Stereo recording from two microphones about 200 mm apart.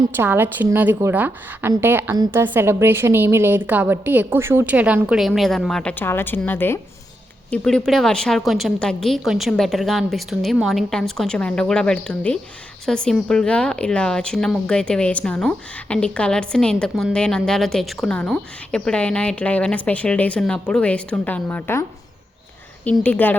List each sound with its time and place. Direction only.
0.2 s a woman's voice: 10° right (ahead or behind); by 23.3 s 10° left (ahead or behind)